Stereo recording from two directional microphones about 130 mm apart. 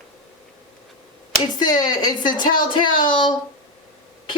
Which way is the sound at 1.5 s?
30° left (ahead or behind).